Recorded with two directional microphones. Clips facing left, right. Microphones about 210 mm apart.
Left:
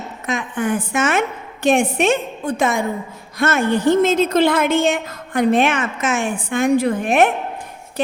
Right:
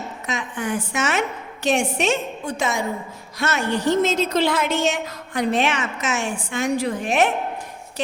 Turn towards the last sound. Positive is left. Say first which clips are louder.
# left 4 dB
turn(degrees=55)  # may be behind; listen again after turning